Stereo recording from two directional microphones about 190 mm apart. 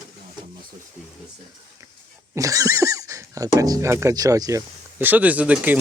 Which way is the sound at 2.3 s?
15° right (ahead or behind).